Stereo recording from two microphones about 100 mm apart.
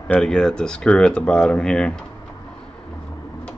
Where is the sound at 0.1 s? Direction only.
5° left (ahead or behind).